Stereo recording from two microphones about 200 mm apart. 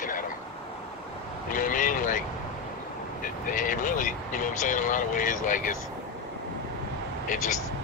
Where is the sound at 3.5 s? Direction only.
40° left (ahead or behind).